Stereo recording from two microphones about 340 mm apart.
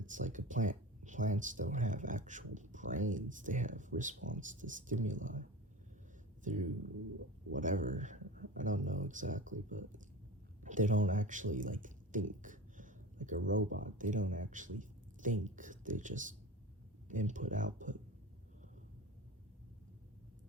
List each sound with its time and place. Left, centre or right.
0.0 s speech: right